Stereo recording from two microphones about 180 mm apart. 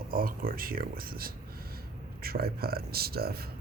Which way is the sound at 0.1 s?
55° right (ahead or behind).